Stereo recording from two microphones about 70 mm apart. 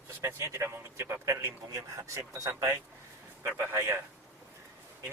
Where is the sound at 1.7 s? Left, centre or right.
Right.